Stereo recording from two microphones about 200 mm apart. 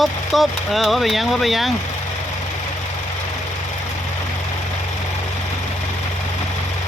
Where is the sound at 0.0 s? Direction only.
Centre (ahead or behind).